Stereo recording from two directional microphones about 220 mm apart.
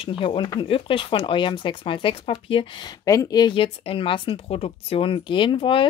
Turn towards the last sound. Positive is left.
turn(degrees=25)  # may be behind; listen again after turning